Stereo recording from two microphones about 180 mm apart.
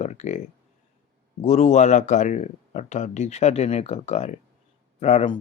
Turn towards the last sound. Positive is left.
turn(degrees=30)  # may be behind; listen again after turning